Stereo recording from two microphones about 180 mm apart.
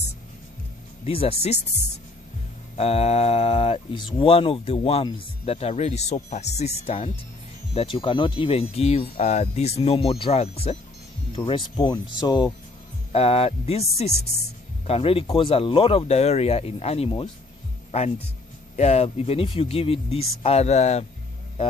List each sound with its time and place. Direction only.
1.0 s speech: 30° left (ahead or behind)
13.1 s speech: 35° left (ahead or behind)
18.8 s speech: 35° left (ahead or behind)